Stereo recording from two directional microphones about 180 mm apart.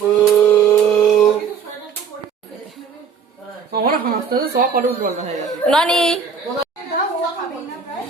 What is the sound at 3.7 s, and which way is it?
Speech, 55° right (ahead or behind).